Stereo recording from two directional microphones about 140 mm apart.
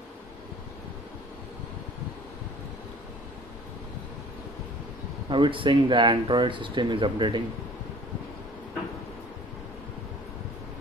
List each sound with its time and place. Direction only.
5.3 s speech: 35° right (ahead or behind)